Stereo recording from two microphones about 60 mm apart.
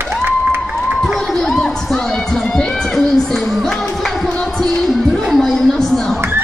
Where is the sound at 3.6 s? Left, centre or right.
Centre.